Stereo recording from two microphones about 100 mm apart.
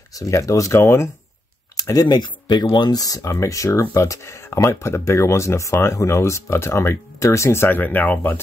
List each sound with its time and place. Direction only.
0.1 s speech: 35° left (ahead or behind)
1.8 s speech: 40° left (ahead or behind); by 8.4 s 15° left (ahead or behind)